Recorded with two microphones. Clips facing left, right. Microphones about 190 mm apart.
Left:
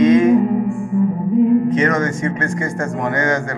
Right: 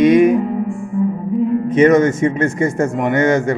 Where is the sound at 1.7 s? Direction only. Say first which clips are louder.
Right 6 dB; 20° right (ahead or behind).